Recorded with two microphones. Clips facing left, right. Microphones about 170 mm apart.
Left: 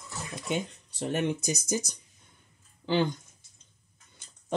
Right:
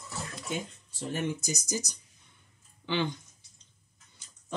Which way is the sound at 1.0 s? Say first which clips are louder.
Left 4 dB; 65° left (ahead or behind).